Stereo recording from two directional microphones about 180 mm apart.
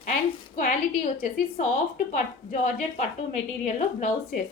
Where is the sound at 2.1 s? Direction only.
40° left (ahead or behind).